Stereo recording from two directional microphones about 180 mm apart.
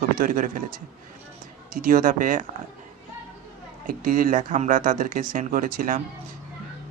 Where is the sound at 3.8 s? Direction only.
50° right (ahead or behind).